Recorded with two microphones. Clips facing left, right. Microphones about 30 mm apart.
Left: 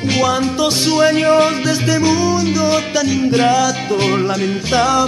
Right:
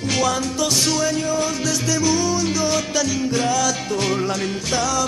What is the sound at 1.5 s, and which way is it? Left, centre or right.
Music, left.